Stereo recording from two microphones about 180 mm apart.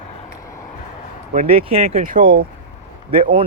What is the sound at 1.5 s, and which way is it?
Speech, 30° right (ahead or behind).